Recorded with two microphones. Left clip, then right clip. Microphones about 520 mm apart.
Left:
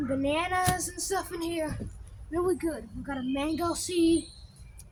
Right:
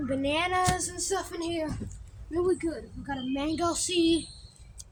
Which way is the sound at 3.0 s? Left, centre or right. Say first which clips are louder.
Even; left.